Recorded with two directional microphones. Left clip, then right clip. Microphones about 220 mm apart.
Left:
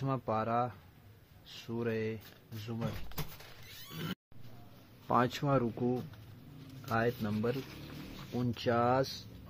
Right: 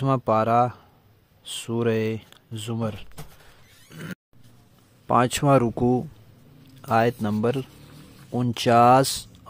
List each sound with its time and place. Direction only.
0.0 s speech: 55° right (ahead or behind)
3.9 s a sound: 15° right (ahead or behind)
5.0 s speech: 40° right (ahead or behind)